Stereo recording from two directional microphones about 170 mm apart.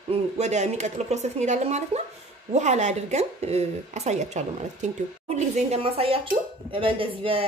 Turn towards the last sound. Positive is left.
turn(degrees=-30)  # may be behind; listen again after turning